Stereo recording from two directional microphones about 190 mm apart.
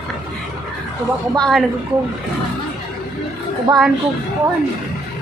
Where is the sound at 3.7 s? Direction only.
20° right (ahead or behind).